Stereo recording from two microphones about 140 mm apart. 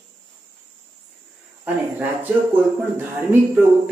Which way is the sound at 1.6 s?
10° right (ahead or behind).